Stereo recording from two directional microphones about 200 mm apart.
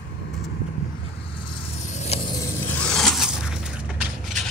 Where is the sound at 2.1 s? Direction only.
30° left (ahead or behind).